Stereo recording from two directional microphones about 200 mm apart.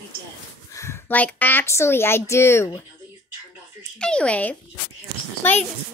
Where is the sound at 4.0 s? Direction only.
5° left (ahead or behind).